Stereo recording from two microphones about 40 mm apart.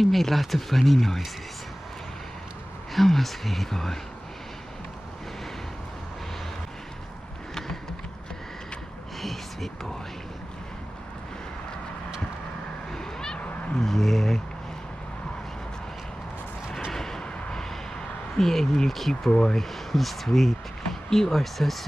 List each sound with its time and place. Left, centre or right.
0.0 s speech: centre
2.9 s speech: centre
9.2 s a sound: centre
12.9 s cat: centre
13.7 s speech: centre
16.9 s artillery fire: centre
17.2 s vehicle: centre
18.3 s speech: centre
19.3 s speech: centre
19.6 s speech: centre